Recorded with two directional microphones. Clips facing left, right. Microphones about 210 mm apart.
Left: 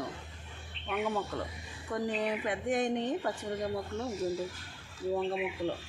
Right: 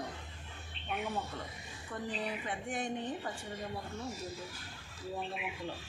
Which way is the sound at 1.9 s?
70° left (ahead or behind).